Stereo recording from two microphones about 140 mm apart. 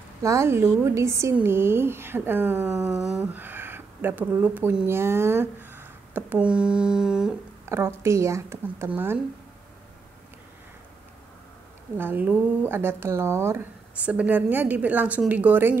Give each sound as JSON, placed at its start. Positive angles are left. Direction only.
{"t": 0.2, "sound": "a woman's voice", "side_deg": -20}
{"t": 7.6, "sound": "a woman's voice", "side_deg": -20}
{"t": 12.0, "sound": "a woman's voice", "side_deg": -15}